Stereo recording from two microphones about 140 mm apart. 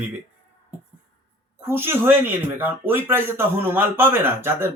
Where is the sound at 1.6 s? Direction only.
15° right (ahead or behind).